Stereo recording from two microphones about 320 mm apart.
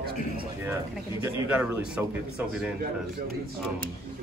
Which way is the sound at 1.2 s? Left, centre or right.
Centre.